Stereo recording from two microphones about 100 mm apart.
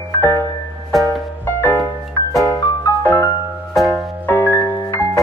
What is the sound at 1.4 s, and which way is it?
Music, 20° left (ahead or behind).